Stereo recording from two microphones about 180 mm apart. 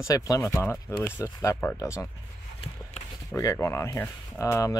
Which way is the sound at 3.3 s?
15° left (ahead or behind).